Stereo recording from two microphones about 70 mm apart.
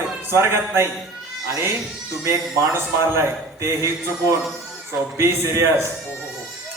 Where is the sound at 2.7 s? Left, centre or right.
Right.